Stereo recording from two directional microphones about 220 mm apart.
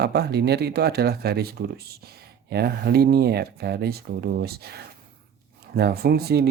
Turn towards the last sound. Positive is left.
turn(degrees=-45)  # may be behind; listen again after turning